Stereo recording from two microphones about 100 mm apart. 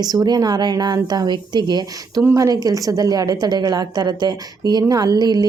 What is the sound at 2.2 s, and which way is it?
A woman's voice, 30° right (ahead or behind).